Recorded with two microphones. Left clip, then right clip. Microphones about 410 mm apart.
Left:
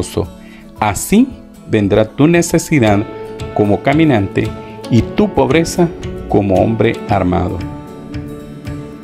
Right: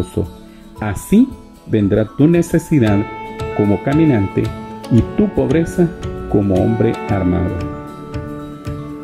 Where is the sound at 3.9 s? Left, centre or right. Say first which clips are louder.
Left 2 dB; centre.